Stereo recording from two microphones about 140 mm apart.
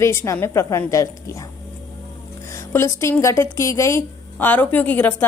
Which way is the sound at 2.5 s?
20° left (ahead or behind).